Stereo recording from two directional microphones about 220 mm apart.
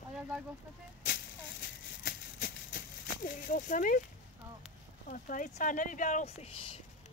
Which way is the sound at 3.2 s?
35° left (ahead or behind).